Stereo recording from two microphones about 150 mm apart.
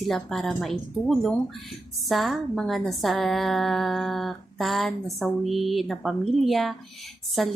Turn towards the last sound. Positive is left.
turn(degrees=0)  # may be behind; listen again after turning